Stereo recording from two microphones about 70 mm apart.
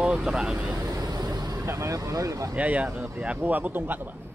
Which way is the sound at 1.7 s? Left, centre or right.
Right.